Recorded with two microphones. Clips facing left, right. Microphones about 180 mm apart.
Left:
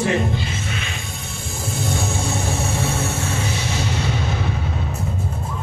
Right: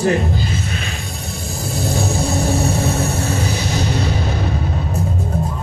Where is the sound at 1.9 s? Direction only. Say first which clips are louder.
Right 5 dB; 35° right (ahead or behind).